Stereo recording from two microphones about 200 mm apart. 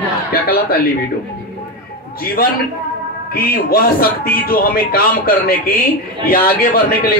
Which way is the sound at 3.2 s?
50° left (ahead or behind).